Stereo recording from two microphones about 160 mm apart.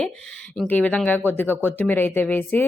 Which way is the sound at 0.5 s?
5° left (ahead or behind).